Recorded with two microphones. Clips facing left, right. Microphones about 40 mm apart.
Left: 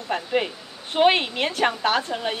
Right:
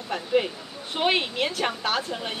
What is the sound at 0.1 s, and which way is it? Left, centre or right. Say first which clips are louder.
A woman's voice: even; centre.